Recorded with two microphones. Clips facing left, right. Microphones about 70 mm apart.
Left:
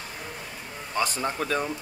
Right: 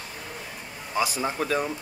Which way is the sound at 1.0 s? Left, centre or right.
Centre.